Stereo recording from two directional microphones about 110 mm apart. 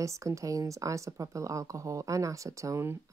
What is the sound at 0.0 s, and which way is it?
Speech, 30° right (ahead or behind).